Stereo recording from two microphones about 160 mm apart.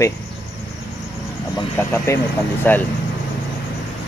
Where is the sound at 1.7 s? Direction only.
15° left (ahead or behind).